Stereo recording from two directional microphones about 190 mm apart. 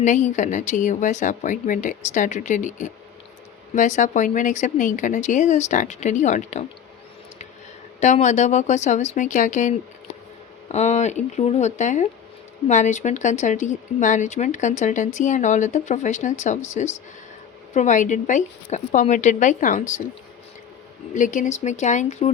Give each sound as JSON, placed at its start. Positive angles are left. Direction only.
{"t": 0.0, "sound": "speech", "side_deg": 40}
{"t": 8.0, "sound": "speech", "side_deg": 40}
{"t": 21.1, "sound": "speech", "side_deg": 45}